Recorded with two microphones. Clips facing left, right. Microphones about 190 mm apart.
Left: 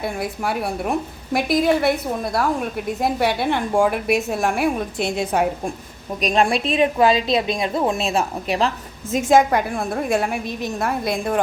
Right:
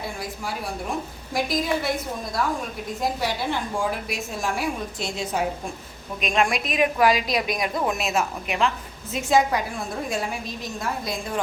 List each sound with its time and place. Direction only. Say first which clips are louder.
0.0 s a woman's voice: left 7 dB; 60° left (ahead or behind)
6.2 s a woman's voice: left 5 dB; 35° left (ahead or behind)
9.1 s a woman's voice: left 5 dB; 50° left (ahead or behind)